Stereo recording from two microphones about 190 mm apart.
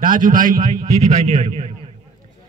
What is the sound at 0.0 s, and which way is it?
A man's voice, 45° right (ahead or behind).